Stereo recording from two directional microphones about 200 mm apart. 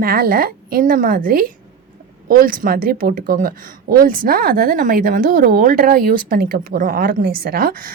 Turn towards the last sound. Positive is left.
turn(degrees=-45)  # may be behind; listen again after turning